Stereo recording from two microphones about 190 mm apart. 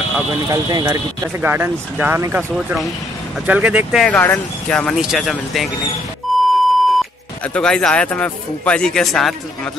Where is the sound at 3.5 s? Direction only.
5° right (ahead or behind).